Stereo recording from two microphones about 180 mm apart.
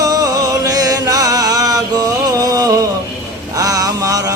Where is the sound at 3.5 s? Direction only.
20° right (ahead or behind).